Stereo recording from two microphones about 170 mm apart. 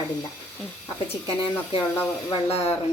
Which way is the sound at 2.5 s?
35° left (ahead or behind).